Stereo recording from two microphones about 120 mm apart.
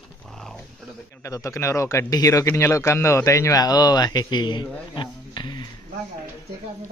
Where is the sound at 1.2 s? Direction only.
25° left (ahead or behind).